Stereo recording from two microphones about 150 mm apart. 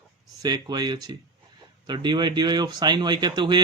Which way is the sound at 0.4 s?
25° right (ahead or behind).